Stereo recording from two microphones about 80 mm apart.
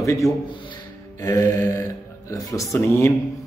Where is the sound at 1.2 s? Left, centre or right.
Left.